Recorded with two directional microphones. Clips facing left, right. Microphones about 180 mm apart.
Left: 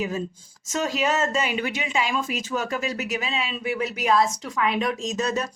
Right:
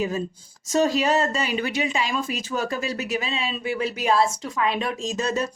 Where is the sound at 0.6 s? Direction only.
35° right (ahead or behind).